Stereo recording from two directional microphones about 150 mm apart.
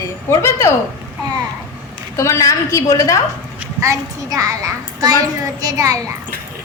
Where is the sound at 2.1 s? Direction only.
20° left (ahead or behind).